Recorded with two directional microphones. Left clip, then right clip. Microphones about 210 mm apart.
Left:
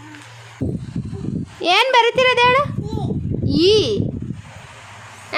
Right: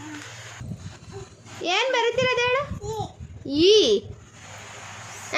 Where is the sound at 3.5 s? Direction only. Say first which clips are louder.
Left 2 dB; 15° left (ahead or behind).